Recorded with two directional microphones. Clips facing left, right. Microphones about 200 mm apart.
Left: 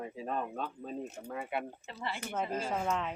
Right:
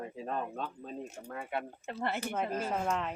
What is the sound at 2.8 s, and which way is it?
Speech, centre (ahead or behind).